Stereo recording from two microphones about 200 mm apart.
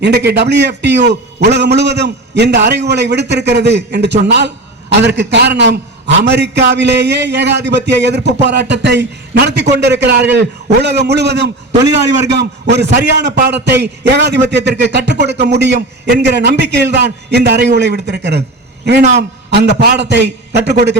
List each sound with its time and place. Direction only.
0.0 s a man's voice: 60° right (ahead or behind)
19.5 s a man's voice: 55° right (ahead or behind)